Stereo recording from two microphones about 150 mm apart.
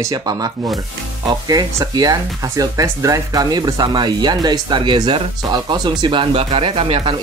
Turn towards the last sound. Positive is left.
turn(degrees=-35)  # may be behind; listen again after turning